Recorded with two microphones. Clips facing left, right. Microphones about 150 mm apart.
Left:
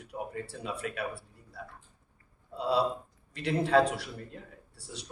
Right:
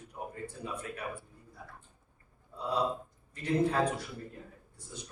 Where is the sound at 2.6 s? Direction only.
80° left.